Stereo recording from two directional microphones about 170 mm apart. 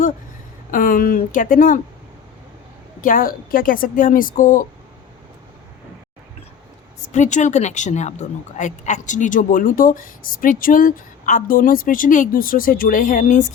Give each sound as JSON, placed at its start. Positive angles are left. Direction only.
{"t": 0.7, "sound": "a woman's voice", "side_deg": 55}
{"t": 3.0, "sound": "a woman's voice", "side_deg": 55}
{"t": 7.1, "sound": "a woman's voice", "side_deg": 45}